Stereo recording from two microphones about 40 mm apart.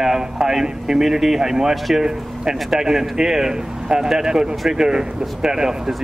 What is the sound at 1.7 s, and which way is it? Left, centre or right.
Speech, centre.